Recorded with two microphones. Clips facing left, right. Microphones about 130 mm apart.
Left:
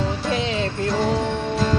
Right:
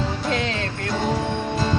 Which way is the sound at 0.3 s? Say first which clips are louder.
Left 1 dB; 15° left (ahead or behind).